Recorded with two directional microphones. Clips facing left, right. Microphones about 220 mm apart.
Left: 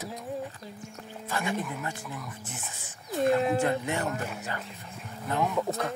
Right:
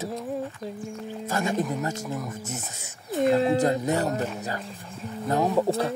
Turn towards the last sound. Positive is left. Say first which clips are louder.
# right 6 dB
turn(degrees=-30)  # may be behind; listen again after turning